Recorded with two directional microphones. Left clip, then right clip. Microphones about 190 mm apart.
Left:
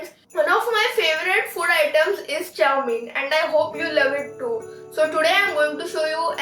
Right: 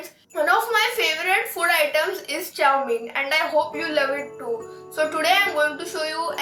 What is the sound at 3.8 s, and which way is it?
Music, 5° right (ahead or behind).